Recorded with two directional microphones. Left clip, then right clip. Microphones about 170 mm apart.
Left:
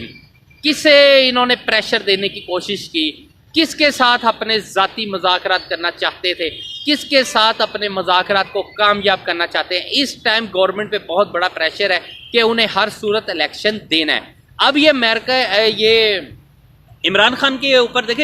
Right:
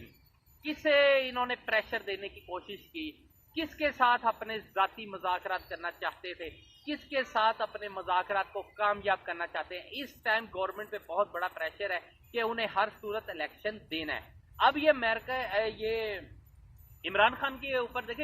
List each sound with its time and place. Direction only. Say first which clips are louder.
0.9 s a woman's voice: left 16 dB; 15° left (ahead or behind)